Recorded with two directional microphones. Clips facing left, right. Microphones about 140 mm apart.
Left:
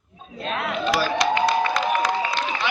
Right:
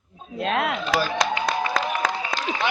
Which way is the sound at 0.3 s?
70° right (ahead or behind).